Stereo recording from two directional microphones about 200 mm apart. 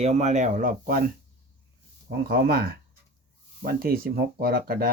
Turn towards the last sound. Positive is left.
turn(degrees=-50)  # may be behind; listen again after turning